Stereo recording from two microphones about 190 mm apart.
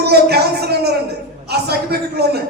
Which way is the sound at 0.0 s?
60° right (ahead or behind).